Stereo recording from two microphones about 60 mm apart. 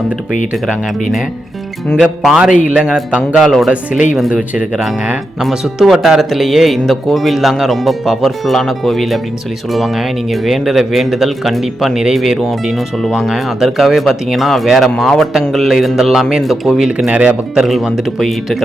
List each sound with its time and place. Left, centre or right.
2.0 s speech: centre
5.4 s a man's voice: centre
17.1 s speech: right
17.6 s a man's voice: centre